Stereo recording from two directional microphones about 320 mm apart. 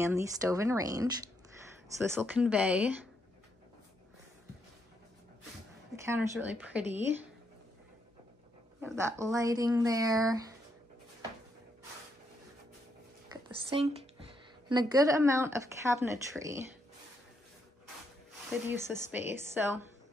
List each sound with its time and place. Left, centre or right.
0.0 s speech: centre
6.0 s speech: centre
8.8 s speech: centre
13.3 s a sound: centre
14.7 s speech: centre
18.5 s speech: centre